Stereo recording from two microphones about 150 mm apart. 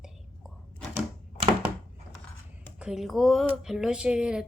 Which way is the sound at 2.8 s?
5° right (ahead or behind).